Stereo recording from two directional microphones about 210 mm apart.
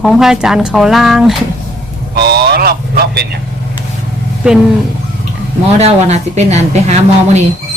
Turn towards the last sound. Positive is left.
turn(degrees=-30)  # may be behind; listen again after turning